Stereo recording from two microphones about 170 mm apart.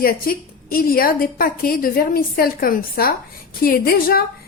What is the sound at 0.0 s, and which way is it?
A woman's voice, 60° left (ahead or behind).